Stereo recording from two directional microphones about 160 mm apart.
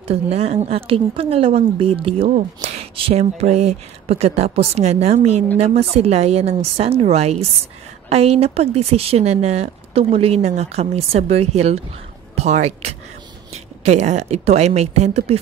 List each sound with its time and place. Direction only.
0.1 s a woman's voice: 40° right (ahead or behind)